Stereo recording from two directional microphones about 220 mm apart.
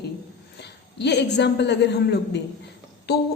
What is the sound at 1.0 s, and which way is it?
A woman's voice, 50° left (ahead or behind).